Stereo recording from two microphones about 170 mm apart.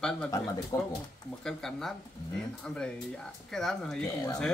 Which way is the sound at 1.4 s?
Centre (ahead or behind).